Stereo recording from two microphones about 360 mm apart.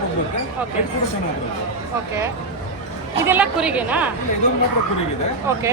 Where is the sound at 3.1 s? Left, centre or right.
Centre.